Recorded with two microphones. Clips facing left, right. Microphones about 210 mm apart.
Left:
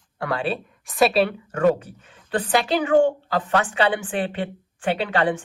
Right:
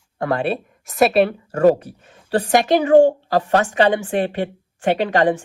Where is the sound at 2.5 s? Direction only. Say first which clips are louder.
Right 6 dB; 45° right (ahead or behind).